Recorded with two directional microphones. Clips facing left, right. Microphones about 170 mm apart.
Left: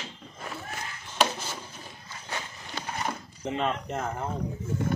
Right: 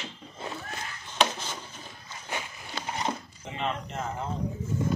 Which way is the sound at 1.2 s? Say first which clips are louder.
Even; 10° left (ahead or behind).